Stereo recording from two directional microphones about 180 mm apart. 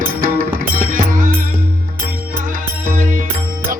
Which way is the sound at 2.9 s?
50° right (ahead or behind).